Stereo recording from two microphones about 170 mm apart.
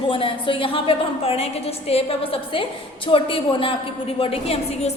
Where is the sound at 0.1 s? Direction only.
30° left (ahead or behind).